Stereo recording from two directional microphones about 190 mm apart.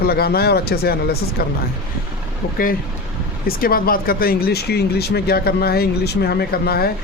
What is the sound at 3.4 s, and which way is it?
A man's voice, 50° left (ahead or behind).